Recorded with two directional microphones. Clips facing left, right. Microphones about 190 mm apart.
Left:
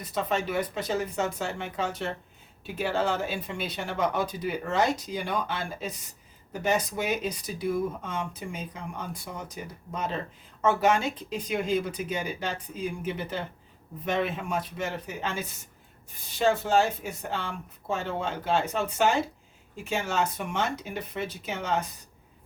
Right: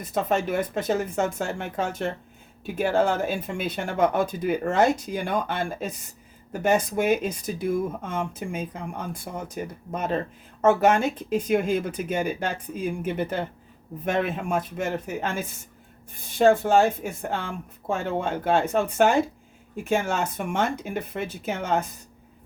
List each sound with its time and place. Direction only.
0.0 s speech: 50° right (ahead or behind)